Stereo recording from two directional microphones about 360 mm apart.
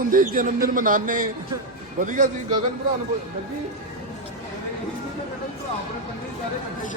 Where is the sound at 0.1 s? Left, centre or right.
Right.